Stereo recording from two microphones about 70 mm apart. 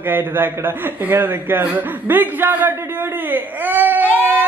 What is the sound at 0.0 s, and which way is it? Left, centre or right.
A man's voice, right.